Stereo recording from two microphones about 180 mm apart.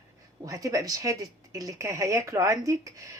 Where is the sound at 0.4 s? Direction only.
20° right (ahead or behind).